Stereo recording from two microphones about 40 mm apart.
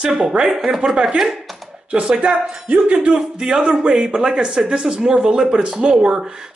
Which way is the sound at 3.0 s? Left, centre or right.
Right.